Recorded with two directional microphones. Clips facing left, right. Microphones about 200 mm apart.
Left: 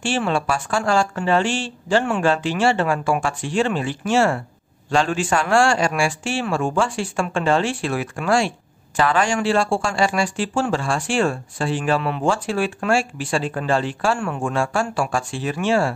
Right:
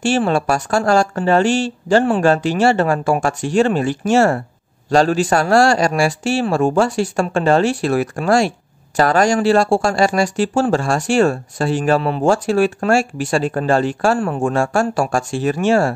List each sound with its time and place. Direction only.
0.0 s speech: 40° right (ahead or behind)